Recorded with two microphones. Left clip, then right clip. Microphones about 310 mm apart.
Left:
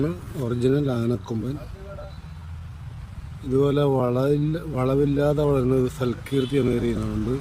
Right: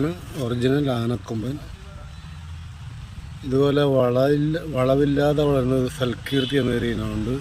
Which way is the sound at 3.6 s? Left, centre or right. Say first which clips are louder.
Right 2 dB; centre.